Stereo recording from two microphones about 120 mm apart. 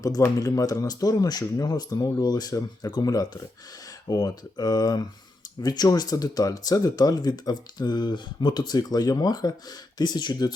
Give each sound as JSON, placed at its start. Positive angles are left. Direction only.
{"t": 0.0, "sound": "speech", "side_deg": 30}